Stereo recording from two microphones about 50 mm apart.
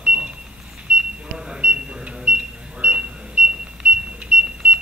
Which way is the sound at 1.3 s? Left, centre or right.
Centre.